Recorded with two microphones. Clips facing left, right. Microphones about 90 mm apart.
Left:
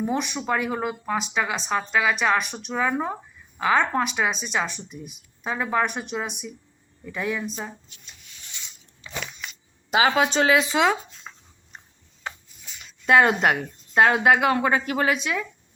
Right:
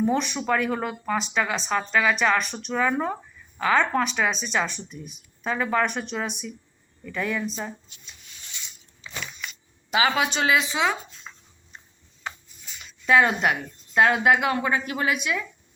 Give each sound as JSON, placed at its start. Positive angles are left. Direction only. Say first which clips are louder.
{"t": 0.0, "sound": "speech", "louder": "right 2 dB", "side_deg": 5}
{"t": 9.9, "sound": "a woman's voice", "louder": "left 3 dB", "side_deg": 35}
{"t": 13.1, "sound": "a woman's voice", "louder": "left 2 dB", "side_deg": 40}